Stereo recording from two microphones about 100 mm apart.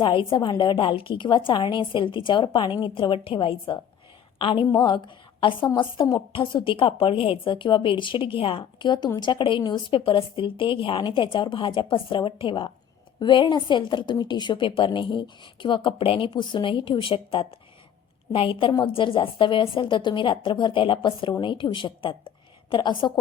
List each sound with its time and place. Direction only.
0.0 s a woman's voice: 55° left (ahead or behind)